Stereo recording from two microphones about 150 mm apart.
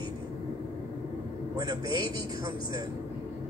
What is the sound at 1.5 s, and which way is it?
Speech, 25° right (ahead or behind).